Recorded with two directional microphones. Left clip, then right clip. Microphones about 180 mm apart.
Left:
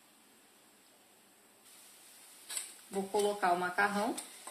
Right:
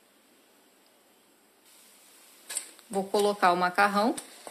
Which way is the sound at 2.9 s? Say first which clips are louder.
Right 7 dB; 60° right (ahead or behind).